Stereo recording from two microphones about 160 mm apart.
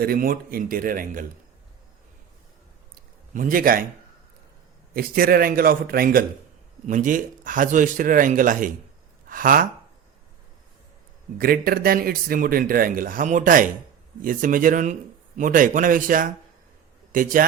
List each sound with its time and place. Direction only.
0.0 s speech: 65° right (ahead or behind)
2.9 s a sound: 60° right (ahead or behind)
4.9 s speech: 65° right (ahead or behind)
6.8 s speech: 55° right (ahead or behind)
11.3 s a man's voice: 65° right (ahead or behind)